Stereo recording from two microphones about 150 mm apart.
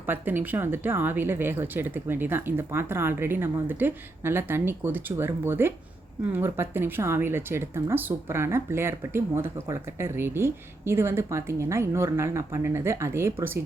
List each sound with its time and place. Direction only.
0.1 s speech: 15° right (ahead or behind)